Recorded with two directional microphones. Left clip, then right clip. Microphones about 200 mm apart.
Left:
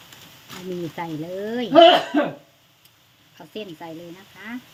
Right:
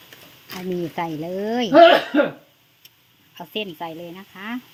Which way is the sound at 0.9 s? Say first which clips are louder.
Right 3 dB; 15° right (ahead or behind).